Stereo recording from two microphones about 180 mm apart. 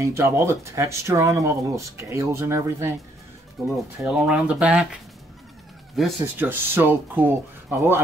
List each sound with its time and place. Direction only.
0.0 s speech: 15° right (ahead or behind)
3.7 s speech: 5° right (ahead or behind)
6.2 s speech: 10° right (ahead or behind)